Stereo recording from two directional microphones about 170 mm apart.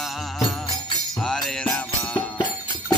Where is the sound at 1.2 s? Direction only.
5° left (ahead or behind).